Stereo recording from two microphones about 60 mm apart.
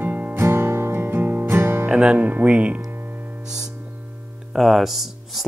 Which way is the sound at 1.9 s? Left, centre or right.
Centre.